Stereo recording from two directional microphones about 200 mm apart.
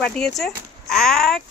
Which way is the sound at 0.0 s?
Centre (ahead or behind).